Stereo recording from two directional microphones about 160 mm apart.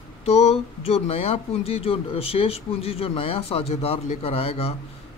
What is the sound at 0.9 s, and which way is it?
Speech, 40° left (ahead or behind).